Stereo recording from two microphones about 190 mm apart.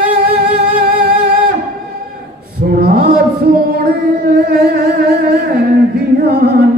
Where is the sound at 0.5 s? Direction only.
55° right (ahead or behind).